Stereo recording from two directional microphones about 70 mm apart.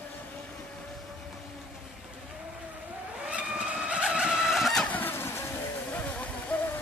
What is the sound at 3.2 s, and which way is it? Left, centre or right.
Vehicle, centre.